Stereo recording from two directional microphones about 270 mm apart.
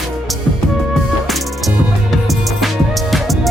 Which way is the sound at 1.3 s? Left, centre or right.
Centre.